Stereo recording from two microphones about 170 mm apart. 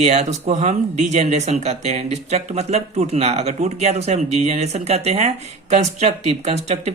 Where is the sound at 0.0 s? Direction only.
40° right (ahead or behind).